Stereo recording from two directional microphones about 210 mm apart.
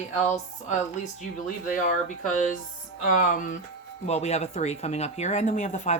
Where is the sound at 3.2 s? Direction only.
40° left (ahead or behind).